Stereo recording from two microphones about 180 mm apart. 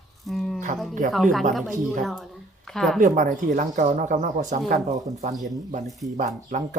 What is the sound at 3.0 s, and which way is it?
Speech, 45° right (ahead or behind).